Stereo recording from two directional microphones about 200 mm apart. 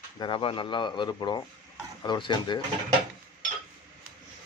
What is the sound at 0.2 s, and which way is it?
Speech, 25° left (ahead or behind).